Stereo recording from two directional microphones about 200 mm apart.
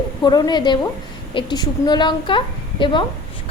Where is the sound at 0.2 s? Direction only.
20° left (ahead or behind).